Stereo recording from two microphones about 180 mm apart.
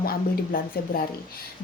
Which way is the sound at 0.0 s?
55° left (ahead or behind).